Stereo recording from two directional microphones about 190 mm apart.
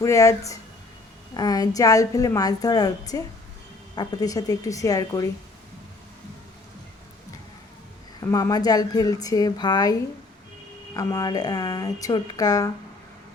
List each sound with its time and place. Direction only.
0.0 s a woman's voice: 15° left (ahead or behind)
8.3 s a woman's voice: 20° left (ahead or behind)